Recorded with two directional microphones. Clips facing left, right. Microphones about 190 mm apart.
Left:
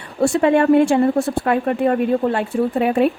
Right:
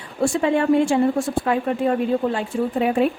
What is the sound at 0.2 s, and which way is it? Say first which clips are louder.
Speech: left 4 dB; 65° left (ahead or behind).